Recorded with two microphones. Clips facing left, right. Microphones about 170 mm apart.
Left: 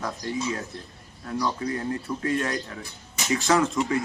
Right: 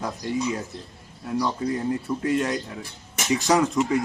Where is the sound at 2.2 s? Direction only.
15° right (ahead or behind).